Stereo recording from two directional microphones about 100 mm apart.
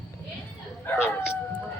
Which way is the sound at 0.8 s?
25° left (ahead or behind).